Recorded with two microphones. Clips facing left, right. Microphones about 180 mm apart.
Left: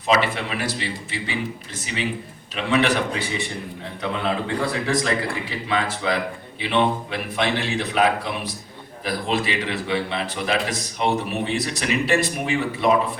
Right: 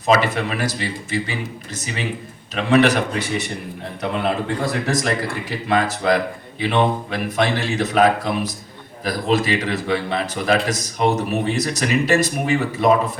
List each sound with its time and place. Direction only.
0.0 s a man's voice: 45° right (ahead or behind)
4.0 s a man's voice: 55° right (ahead or behind)